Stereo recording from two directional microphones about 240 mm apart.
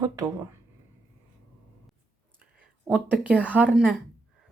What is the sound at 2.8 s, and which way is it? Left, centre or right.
Speech, centre.